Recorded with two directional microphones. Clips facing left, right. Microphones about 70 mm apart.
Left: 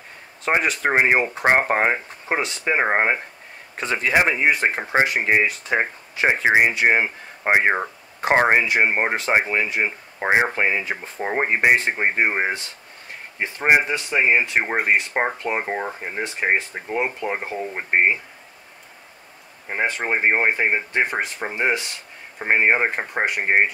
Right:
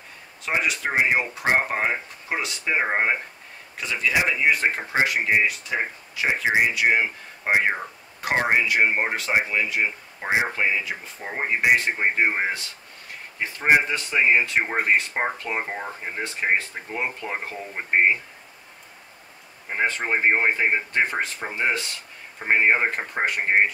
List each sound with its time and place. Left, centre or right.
0.5 s speech: left
3.7 s speech: left; by 18.1 s centre
19.7 s speech: centre